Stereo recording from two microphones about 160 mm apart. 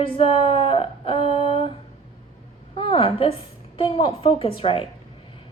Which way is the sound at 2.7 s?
35° left (ahead or behind).